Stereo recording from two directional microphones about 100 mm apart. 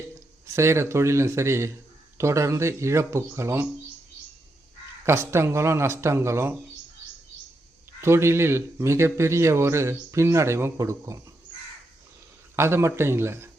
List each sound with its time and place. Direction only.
0.4 s a man's voice: 25° right (ahead or behind)
5.0 s a man's voice: 25° right (ahead or behind)
8.0 s a man's voice: 25° right (ahead or behind)
12.5 s a man's voice: 25° right (ahead or behind)